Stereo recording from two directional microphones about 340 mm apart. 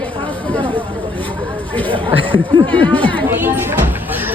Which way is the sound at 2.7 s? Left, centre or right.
Centre.